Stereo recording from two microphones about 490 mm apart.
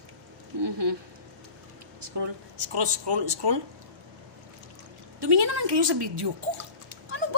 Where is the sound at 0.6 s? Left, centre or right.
Right.